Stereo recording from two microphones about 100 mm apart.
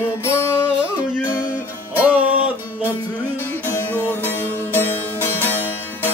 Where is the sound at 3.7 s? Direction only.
20° left (ahead or behind).